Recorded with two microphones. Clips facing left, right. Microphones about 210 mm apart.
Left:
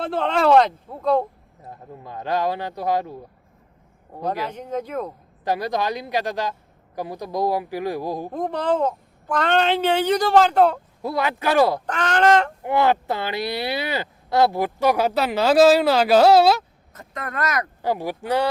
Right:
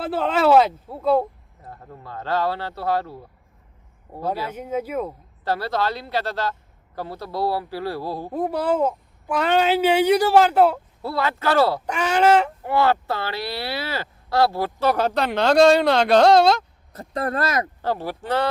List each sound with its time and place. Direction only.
0.0 s speech: 5° right (ahead or behind)
1.6 s speech: 15° left (ahead or behind)
4.4 s a woman's voice: 5° right (ahead or behind)
5.5 s speech: 15° left (ahead or behind)
8.3 s a woman's voice: 5° right (ahead or behind)
11.0 s speech: 15° left (ahead or behind)
11.9 s a woman's voice: 10° right (ahead or behind)
12.6 s speech: 20° left (ahead or behind)
16.9 s speech: 35° right (ahead or behind)
17.8 s speech: 15° left (ahead or behind)